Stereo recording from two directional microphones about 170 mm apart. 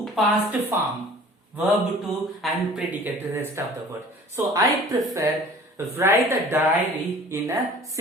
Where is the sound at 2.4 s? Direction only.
5° right (ahead or behind).